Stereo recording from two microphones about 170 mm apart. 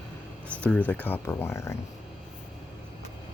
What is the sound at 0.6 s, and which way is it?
Speech, 10° left (ahead or behind).